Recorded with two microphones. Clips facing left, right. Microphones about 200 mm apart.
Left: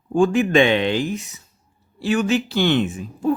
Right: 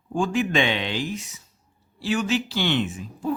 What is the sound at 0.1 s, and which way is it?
Speech, 55° left (ahead or behind).